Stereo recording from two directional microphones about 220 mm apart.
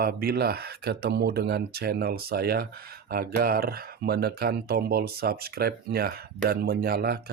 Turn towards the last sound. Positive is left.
turn(degrees=-45)  # may be behind; listen again after turning